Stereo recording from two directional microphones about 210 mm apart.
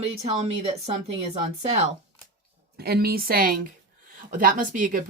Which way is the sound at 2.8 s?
45° right (ahead or behind).